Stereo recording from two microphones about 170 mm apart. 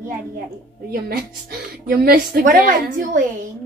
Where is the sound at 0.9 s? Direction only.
65° right (ahead or behind).